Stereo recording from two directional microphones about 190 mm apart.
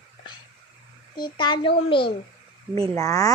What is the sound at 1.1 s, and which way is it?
A child's voice, 25° left (ahead or behind).